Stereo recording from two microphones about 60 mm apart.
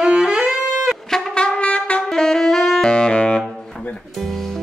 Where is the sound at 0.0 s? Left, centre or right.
Centre.